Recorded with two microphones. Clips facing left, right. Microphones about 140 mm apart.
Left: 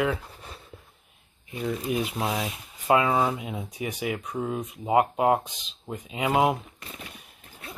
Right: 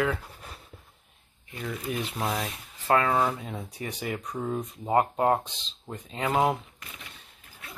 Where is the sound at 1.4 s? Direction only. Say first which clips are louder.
Left 5 dB; 20° left (ahead or behind).